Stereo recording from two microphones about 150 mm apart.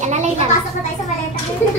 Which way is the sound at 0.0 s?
50° right (ahead or behind).